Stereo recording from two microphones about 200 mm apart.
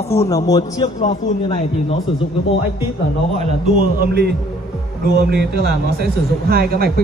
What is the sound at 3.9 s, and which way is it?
A man's voice, 55° right (ahead or behind).